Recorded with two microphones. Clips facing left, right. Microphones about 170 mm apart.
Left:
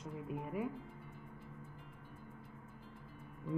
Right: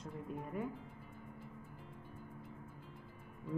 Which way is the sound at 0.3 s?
5° left (ahead or behind).